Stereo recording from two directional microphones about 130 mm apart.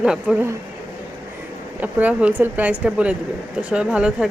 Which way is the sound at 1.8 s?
10° right (ahead or behind).